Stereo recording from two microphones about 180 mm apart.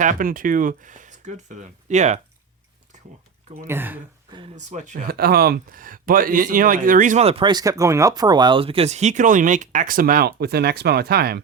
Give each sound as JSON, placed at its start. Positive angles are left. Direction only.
{"t": 0.0, "sound": "speech", "side_deg": -50}
{"t": 2.9, "sound": "a sound", "side_deg": -40}
{"t": 3.6, "sound": "speech", "side_deg": -10}
{"t": 4.5, "sound": "speech", "side_deg": -40}